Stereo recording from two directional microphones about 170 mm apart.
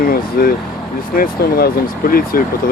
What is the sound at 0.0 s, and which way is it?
Speech, 60° left (ahead or behind).